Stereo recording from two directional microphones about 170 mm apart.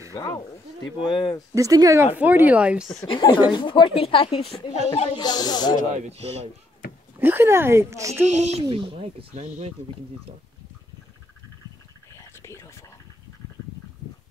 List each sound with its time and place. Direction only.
1.0 s a woman's voice: 30° left (ahead or behind)
1.5 s speech: 20° right (ahead or behind); by 3.1 s centre (ahead or behind)
3.1 s a woman's voice: 30° left (ahead or behind)
5.2 s a woman's voice: 25° left (ahead or behind)
6.0 s a child's voice: 40° right (ahead or behind)
7.2 s speech: 10° right (ahead or behind)
8.3 s a child's voice: 40° right (ahead or behind)
12.2 s whispering: 15° left (ahead or behind)